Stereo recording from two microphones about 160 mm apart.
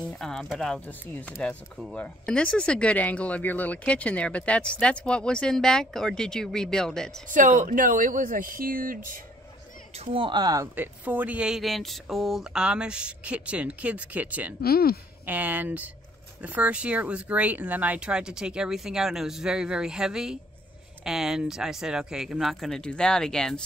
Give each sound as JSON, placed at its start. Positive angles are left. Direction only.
{"t": 0.0, "sound": "speech", "side_deg": 0}
{"t": 7.2, "sound": "speech", "side_deg": -55}
{"t": 9.9, "sound": "speech", "side_deg": -35}
{"t": 10.8, "sound": "speech", "side_deg": -10}
{"t": 14.6, "sound": "speech", "side_deg": 70}
{"t": 15.2, "sound": "speech", "side_deg": -10}